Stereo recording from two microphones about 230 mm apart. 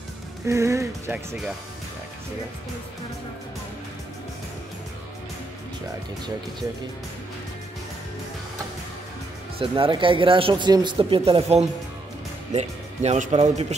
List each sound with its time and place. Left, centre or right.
0.5 s speech: centre
9.6 s speech: right